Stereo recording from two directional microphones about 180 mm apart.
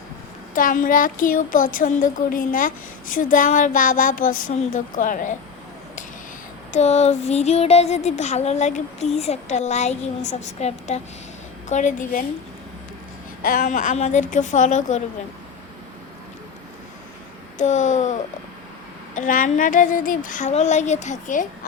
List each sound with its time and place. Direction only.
0.5 s a woman's voice: 50° left (ahead or behind)
6.7 s a sound: 40° left (ahead or behind)
11.7 s a woman's voice: 45° left (ahead or behind)
13.4 s a woman's voice: 50° left (ahead or behind)
17.6 s a woman's voice: 40° left (ahead or behind)